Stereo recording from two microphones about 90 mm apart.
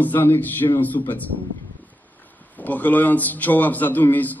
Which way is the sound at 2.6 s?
20° left (ahead or behind).